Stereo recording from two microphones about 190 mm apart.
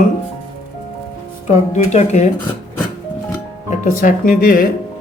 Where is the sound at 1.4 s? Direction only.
35° left (ahead or behind).